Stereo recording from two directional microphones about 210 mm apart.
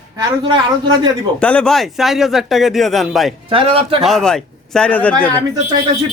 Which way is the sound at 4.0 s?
Centre (ahead or behind).